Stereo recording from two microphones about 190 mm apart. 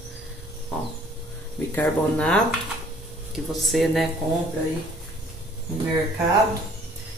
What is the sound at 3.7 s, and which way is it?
Speech, centre (ahead or behind).